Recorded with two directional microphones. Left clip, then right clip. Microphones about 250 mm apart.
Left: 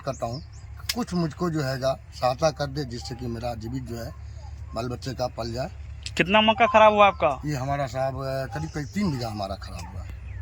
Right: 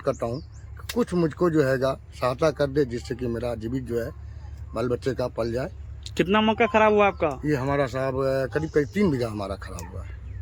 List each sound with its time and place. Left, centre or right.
0.0 s speech: right
6.0 s a man's voice: centre
7.4 s speech: right